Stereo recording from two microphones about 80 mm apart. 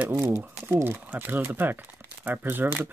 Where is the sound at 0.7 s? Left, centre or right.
Right.